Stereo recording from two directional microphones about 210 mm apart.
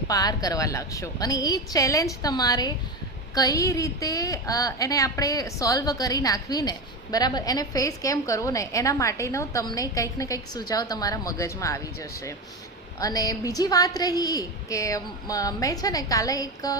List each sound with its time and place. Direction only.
0.1 s a woman's voice: 15° left (ahead or behind)